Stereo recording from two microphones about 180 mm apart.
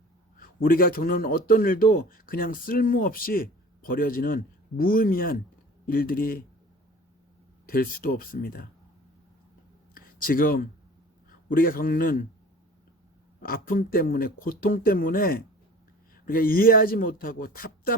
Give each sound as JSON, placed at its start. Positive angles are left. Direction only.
{"t": 0.3, "sound": "a man's voice", "side_deg": 50}
{"t": 7.7, "sound": "speech", "side_deg": 55}
{"t": 9.9, "sound": "a sound", "side_deg": 55}
{"t": 11.3, "sound": "a man's voice", "side_deg": 55}
{"t": 13.4, "sound": "a man's voice", "side_deg": 55}